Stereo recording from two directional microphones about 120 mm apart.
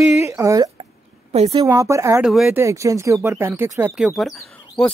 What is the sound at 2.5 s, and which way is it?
Speech, 25° right (ahead or behind).